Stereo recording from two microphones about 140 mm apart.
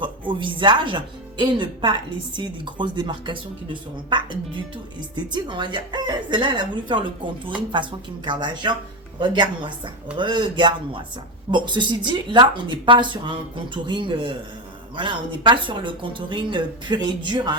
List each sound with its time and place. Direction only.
0.0 s speech: 35° right (ahead or behind)